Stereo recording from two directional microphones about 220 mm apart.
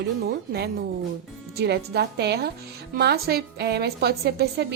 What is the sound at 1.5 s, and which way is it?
A woman's voice, 50° right (ahead or behind).